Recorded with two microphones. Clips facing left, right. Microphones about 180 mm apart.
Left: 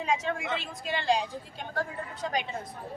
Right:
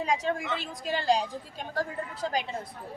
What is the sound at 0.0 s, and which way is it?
A woman's voice, 35° right (ahead or behind).